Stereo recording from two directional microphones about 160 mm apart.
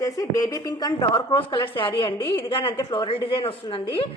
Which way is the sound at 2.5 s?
35° left (ahead or behind).